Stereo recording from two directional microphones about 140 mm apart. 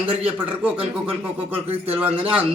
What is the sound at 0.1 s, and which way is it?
Speech, 45° right (ahead or behind).